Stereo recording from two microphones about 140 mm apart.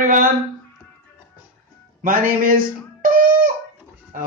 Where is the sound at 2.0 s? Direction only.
85° right.